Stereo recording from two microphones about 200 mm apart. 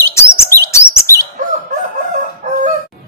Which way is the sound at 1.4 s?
40° right (ahead or behind).